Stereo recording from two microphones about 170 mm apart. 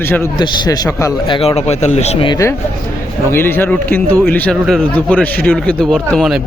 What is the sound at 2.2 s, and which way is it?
A man's voice, 20° left (ahead or behind).